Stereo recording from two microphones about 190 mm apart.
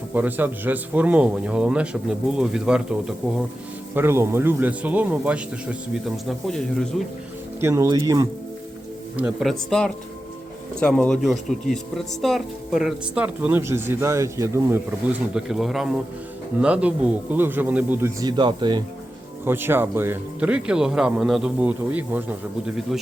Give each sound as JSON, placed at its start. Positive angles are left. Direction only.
{"t": 0.1, "sound": "speech", "side_deg": -10}
{"t": 7.6, "sound": "speech", "side_deg": -15}
{"t": 9.1, "sound": "speech", "side_deg": -5}
{"t": 19.5, "sound": "speech", "side_deg": -10}